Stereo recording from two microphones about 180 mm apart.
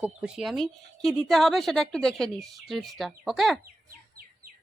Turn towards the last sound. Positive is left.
turn(degrees=0)  # may be behind; listen again after turning